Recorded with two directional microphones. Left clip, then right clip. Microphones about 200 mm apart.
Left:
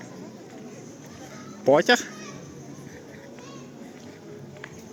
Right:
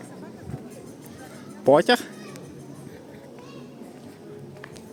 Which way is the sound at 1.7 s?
15° right (ahead or behind).